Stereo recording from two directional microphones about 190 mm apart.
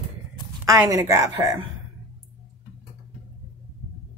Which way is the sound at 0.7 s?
15° right (ahead or behind).